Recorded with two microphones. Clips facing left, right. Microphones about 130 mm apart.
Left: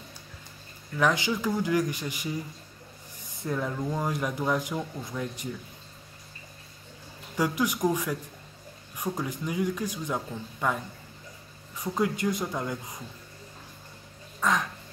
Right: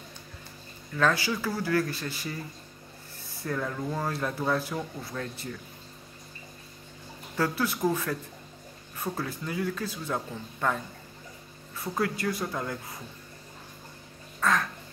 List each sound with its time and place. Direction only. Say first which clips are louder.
0.9 s speech: left 1 dB; 15° left (ahead or behind)
7.3 s speech: left 1 dB; 15° left (ahead or behind)
14.4 s quack: even; 15° left (ahead or behind)